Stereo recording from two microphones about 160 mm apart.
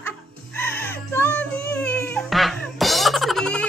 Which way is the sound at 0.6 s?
15° left (ahead or behind).